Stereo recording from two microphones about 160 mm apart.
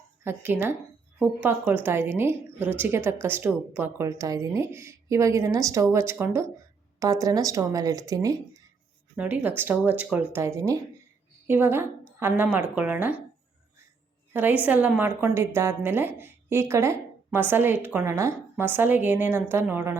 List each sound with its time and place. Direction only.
0.3 s a woman's voice: 15° right (ahead or behind)
9.1 s a woman's voice: 10° right (ahead or behind)
14.6 s a woman's voice: 10° right (ahead or behind)